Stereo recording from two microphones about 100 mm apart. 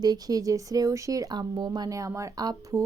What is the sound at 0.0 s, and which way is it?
Speech, 40° right (ahead or behind).